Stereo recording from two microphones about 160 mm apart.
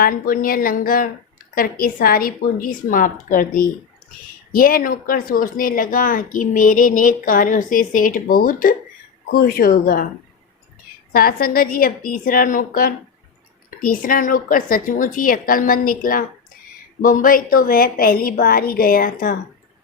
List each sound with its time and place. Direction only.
0.0 s speech: 60° left (ahead or behind)
11.1 s speech: 65° left (ahead or behind)